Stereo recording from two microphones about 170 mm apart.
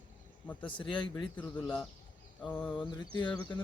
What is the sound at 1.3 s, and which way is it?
Speech, 10° left (ahead or behind).